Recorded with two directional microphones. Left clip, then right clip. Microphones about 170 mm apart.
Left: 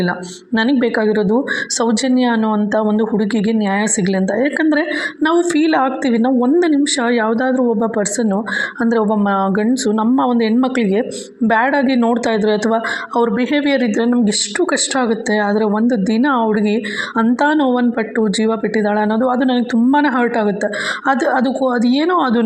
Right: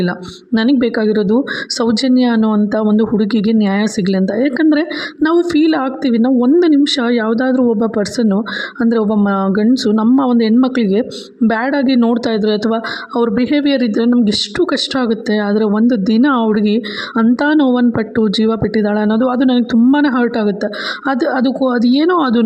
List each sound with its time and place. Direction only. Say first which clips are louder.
0.8 s speech: right 1 dB; 40° right (ahead or behind)